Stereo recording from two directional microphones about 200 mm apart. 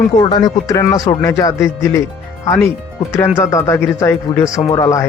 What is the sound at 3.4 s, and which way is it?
Speech, 15° left (ahead or behind).